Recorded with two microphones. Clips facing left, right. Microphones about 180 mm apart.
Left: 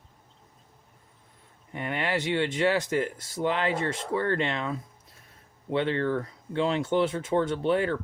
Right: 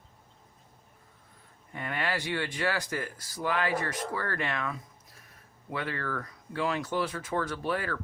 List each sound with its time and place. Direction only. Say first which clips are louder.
1.7 s speech: left 4 dB; 20° left (ahead or behind)